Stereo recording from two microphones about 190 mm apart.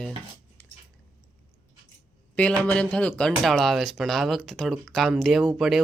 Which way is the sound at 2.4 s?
5° left (ahead or behind).